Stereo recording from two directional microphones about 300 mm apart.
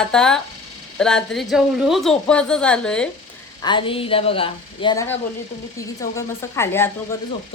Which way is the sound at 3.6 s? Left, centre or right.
Centre.